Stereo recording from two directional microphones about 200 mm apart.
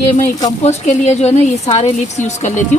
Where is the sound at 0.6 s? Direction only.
35° left (ahead or behind).